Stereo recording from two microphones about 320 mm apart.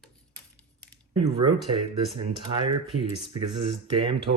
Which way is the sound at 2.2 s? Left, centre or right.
Centre.